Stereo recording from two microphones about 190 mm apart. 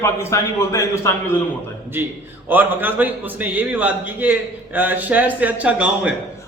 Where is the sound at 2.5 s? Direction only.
10° right (ahead or behind).